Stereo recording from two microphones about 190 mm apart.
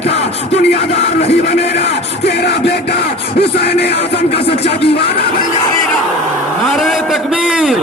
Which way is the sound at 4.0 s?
30° left (ahead or behind).